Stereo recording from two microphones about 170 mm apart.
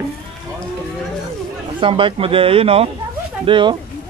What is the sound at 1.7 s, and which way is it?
Speech, 30° right (ahead or behind).